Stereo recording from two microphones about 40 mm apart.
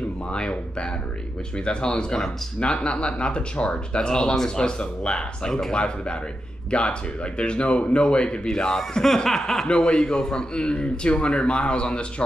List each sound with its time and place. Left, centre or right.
0.3 s a man's voice: left
1.6 s a man's voice: left
9.7 s a man's voice: left